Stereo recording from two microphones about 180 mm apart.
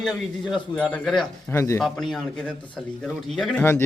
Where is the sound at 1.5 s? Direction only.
15° left (ahead or behind).